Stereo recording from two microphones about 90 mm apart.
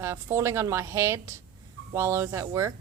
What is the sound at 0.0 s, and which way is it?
A man's voice, 30° right (ahead or behind).